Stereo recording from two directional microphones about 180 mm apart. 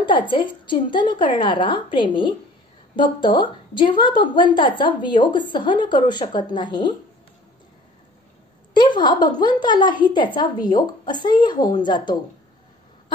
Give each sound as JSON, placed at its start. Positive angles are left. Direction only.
{"t": 0.0, "sound": "a woman's voice", "side_deg": 25}
{"t": 8.7, "sound": "a woman's voice", "side_deg": 25}